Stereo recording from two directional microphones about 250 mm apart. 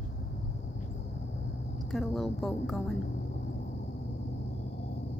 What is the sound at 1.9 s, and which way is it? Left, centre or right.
A woman's voice, centre.